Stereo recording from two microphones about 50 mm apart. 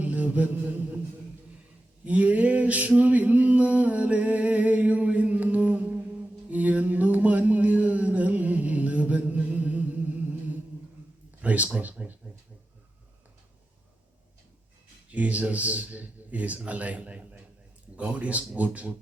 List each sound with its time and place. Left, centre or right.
0.0 s mantra: right
2.0 s a sound: right
11.4 s speech: right
15.1 s a man's voice: right